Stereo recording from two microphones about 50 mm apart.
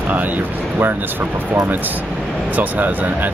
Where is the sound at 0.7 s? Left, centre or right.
Right.